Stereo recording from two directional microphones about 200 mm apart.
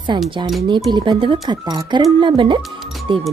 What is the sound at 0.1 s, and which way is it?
Speech, 20° right (ahead or behind).